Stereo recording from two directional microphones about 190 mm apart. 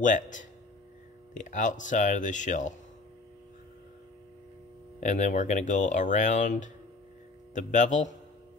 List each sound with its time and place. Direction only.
0.0 s speech: 40° left (ahead or behind)
5.0 s speech: 40° left (ahead or behind)